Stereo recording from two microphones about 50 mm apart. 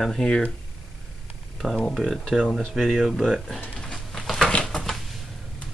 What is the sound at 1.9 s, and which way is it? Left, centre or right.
Speech, centre.